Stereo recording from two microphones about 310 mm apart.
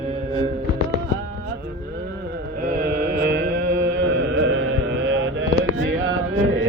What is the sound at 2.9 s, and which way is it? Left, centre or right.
Mantra, right.